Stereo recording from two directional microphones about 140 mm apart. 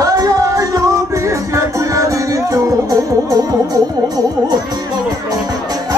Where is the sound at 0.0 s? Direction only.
25° right (ahead or behind).